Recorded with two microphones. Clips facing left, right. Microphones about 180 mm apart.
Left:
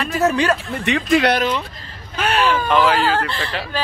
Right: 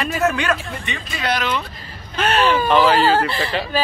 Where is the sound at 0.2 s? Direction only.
35° left (ahead or behind).